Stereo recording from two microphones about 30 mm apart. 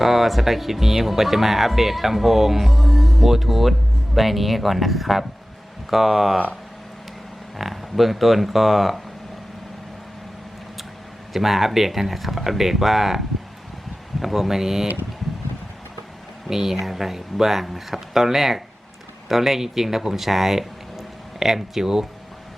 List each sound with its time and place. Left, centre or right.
0.0 s speech: centre
7.6 s speech: centre
11.3 s speech: centre
16.5 s speech: centre